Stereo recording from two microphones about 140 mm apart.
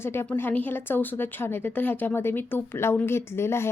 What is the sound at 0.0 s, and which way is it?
A woman's voice, 15° left (ahead or behind).